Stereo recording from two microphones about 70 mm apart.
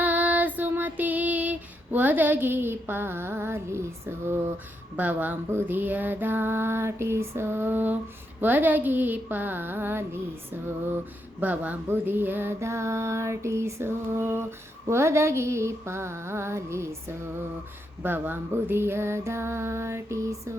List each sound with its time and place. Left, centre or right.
0.0 s female singing: right
4.9 s speech: right
5.5 s female singing: right
8.4 s speech: right
11.3 s speech: right
11.9 s female singing: right
18.0 s female singing: right